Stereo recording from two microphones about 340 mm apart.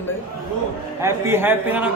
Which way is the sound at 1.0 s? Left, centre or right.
Centre.